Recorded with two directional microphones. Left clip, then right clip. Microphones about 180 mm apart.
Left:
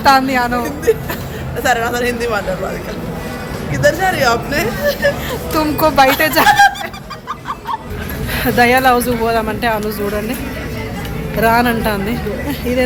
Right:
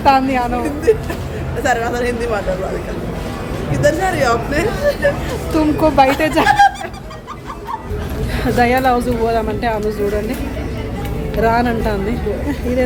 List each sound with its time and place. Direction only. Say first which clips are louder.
0.0 s speech: left 2 dB; centre (ahead or behind)
1.6 s speech: left 2 dB; 10° right (ahead or behind)
3.7 s speech: left 2 dB; 15° right (ahead or behind)
5.5 s speech: left 1 dB; 5° left (ahead or behind)
8.4 s speech: left 3 dB; 5° left (ahead or behind)
11.3 s speech: left 2 dB; 5° left (ahead or behind)